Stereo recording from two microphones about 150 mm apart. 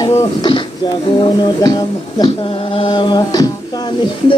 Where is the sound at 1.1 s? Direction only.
30° left (ahead or behind).